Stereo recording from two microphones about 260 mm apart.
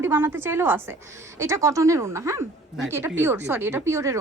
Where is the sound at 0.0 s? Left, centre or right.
Centre.